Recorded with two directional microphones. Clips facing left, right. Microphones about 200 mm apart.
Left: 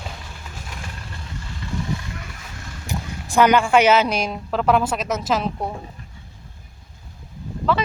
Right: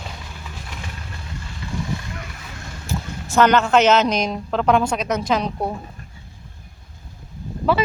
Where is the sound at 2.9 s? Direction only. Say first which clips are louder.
Right 1 dB; 15° left (ahead or behind).